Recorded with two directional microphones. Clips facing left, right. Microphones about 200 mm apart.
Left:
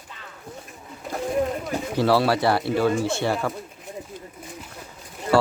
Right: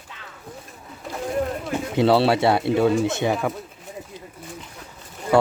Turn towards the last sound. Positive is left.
turn(degrees=-20)  # may be behind; listen again after turning